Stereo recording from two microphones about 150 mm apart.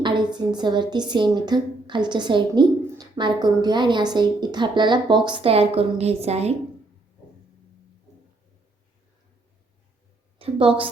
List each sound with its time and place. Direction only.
0.0 s a sound: 30° right (ahead or behind)
0.3 s a woman's voice: 30° right (ahead or behind)
10.3 s a woman's voice: 35° right (ahead or behind)